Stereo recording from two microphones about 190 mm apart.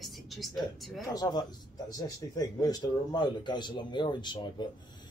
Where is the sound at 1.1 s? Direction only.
20° left (ahead or behind).